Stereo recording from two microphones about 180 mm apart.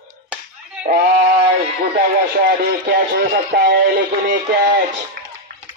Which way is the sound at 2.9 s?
60° right (ahead or behind).